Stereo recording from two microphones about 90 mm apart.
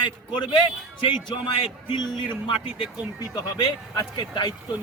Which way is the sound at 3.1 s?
45° left (ahead or behind).